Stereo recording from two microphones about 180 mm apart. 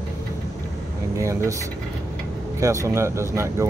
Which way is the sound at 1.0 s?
15° right (ahead or behind).